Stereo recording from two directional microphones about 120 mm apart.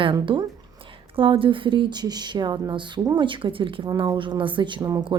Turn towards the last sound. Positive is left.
turn(degrees=-35)  # may be behind; listen again after turning